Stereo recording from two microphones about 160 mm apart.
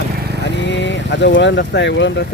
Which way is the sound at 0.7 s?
90° left.